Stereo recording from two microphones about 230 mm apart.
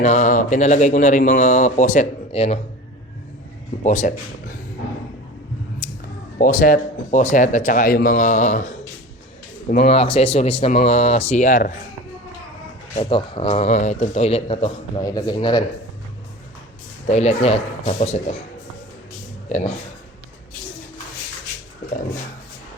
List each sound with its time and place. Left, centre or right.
0.0 s speech: left
3.8 s speech: left
5.8 s a sound: left
6.4 s speech: left
12.9 s speech: left
17.1 s speech: left
19.5 s speech: left